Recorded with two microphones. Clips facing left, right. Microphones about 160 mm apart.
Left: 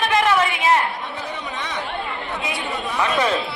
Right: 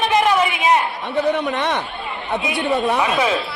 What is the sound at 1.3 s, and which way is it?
Speech, 65° right (ahead or behind).